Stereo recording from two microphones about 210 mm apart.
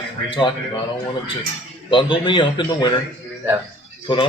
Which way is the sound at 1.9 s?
25° left (ahead or behind).